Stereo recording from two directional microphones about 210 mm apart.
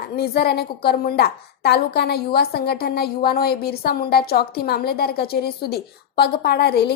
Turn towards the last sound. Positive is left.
turn(degrees=50)  # may be behind; listen again after turning